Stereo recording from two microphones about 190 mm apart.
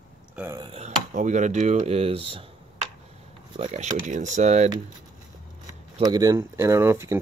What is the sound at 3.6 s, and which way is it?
Speech, 35° right (ahead or behind).